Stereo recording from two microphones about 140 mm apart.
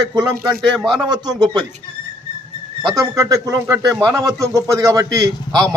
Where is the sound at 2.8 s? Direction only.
25° right (ahead or behind).